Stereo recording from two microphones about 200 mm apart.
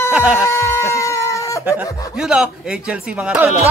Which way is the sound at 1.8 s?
15° left (ahead or behind).